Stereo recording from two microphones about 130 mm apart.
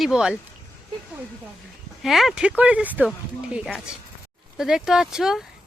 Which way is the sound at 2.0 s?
Centre (ahead or behind).